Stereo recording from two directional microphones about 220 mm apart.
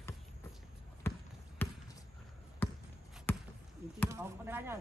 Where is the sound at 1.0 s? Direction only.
10° left (ahead or behind).